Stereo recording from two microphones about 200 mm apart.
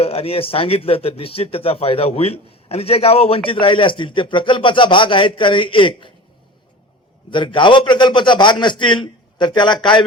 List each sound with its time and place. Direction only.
0.0 s speech: 30° left (ahead or behind)
7.3 s speech: 25° left (ahead or behind)